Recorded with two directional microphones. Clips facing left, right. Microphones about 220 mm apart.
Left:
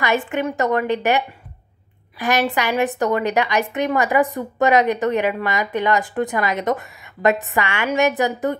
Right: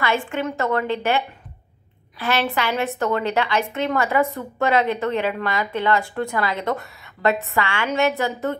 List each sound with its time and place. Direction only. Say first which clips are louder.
0.0 s a woman's voice: left 2 dB; 15° left (ahead or behind)